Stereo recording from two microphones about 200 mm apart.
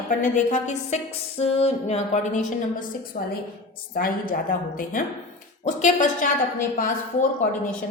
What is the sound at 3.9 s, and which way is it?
Speech, 45° left (ahead or behind).